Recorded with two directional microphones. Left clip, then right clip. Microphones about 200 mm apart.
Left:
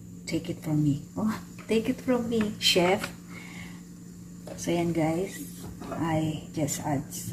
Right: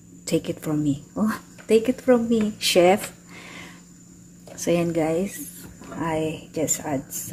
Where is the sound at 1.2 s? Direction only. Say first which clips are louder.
Right 8 dB; 55° right (ahead or behind).